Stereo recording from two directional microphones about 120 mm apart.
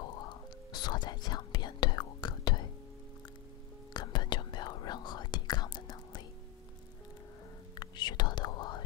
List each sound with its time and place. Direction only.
0.0 s whispering: 40° left (ahead or behind)
3.9 s whispering: 35° left (ahead or behind)
7.8 s whispering: 40° left (ahead or behind)